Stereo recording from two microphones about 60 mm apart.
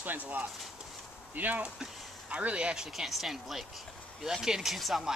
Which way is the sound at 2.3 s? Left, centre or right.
Right.